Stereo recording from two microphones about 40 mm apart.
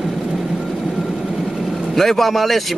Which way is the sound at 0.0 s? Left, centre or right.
Centre.